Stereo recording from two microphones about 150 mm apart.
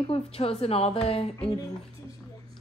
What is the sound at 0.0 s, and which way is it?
A woman's voice, 40° left (ahead or behind).